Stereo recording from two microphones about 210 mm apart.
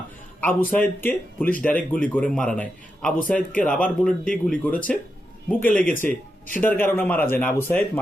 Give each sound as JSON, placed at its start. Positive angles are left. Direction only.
{"t": 0.4, "sound": "speech", "side_deg": 10}
{"t": 1.5, "sound": "speech", "side_deg": 40}
{"t": 1.7, "sound": "a man's voice", "side_deg": 5}
{"t": 6.0, "sound": "speech", "side_deg": 40}
{"t": 6.6, "sound": "speech", "side_deg": 10}